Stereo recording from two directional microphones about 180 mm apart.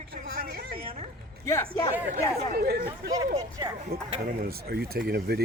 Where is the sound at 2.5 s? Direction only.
55° right (ahead or behind).